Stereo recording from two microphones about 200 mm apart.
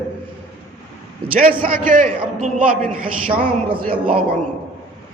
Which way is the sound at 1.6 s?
45° right (ahead or behind).